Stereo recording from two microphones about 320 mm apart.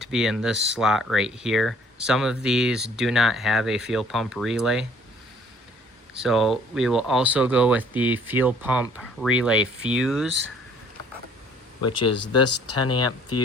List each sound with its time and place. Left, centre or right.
0.0 s speech: centre
6.1 s speech: centre
11.8 s speech: left